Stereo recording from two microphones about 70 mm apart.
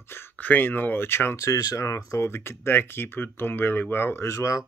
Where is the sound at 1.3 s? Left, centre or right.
Left.